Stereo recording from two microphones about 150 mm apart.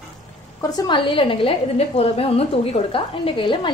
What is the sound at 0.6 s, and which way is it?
A woman's voice, 25° left (ahead or behind).